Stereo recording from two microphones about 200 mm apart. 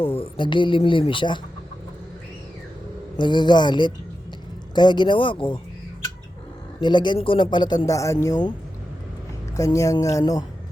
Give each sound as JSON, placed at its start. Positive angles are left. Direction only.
{"t": 0.0, "sound": "a man's voice", "side_deg": 25}
{"t": 3.2, "sound": "a man's voice", "side_deg": 20}
{"t": 6.7, "sound": "a man's voice", "side_deg": 20}
{"t": 9.6, "sound": "speech", "side_deg": 15}